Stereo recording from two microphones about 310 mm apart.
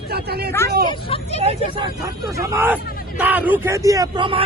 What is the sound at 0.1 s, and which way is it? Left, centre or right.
Speech, right.